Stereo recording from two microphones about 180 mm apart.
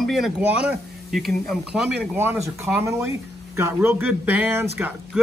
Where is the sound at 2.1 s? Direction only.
10° right (ahead or behind).